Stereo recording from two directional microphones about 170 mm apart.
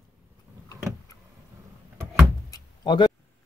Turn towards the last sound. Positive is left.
turn(degrees=25)  # may be behind; listen again after turning